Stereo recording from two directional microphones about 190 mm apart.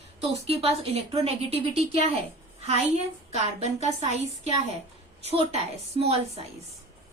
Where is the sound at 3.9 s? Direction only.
35° right (ahead or behind).